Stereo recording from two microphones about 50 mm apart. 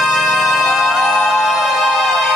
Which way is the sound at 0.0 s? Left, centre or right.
Centre.